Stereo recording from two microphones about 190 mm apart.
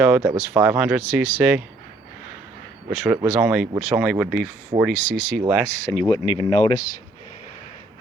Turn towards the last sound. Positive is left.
turn(degrees=25)  # may be behind; listen again after turning